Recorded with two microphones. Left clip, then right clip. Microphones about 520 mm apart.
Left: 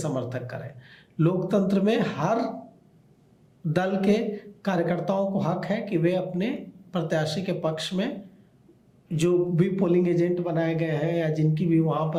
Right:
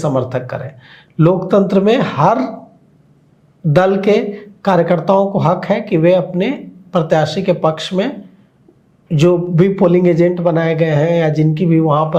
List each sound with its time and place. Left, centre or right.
0.0 s a man's voice: right
3.7 s a man's voice: right
9.1 s a man's voice: right